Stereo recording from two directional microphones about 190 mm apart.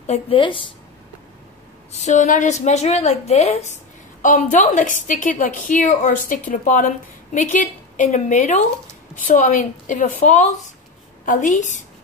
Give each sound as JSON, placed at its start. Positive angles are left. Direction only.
{"t": 0.0, "sound": "speech", "side_deg": 30}
{"t": 1.9, "sound": "a woman's voice", "side_deg": 40}